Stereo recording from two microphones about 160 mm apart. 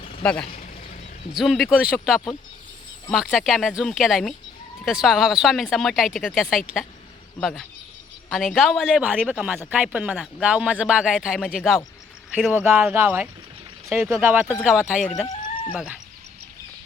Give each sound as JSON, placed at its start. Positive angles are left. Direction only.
{"t": 0.2, "sound": "speech", "side_deg": 5}
{"t": 0.4, "sound": "a sound", "side_deg": 45}
{"t": 1.4, "sound": "speech", "side_deg": 0}